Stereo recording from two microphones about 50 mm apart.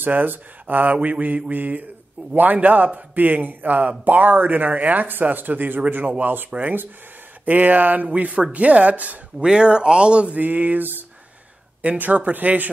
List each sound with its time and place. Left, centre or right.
0.0 s speech: right
7.4 s speech: right
9.4 s speech: centre; by 12.6 s right